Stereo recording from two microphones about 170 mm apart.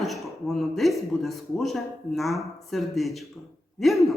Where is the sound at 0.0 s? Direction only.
Centre (ahead or behind).